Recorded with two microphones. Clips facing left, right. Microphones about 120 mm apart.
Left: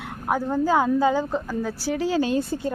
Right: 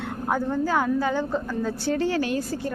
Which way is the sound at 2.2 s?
20° left (ahead or behind).